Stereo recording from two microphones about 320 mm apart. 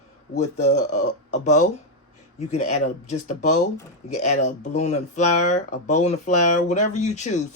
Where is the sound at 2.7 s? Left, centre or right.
Left.